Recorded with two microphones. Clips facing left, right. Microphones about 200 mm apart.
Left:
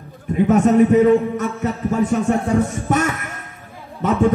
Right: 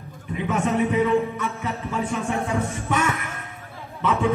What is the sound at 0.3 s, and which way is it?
A man's voice, 45° left (ahead or behind).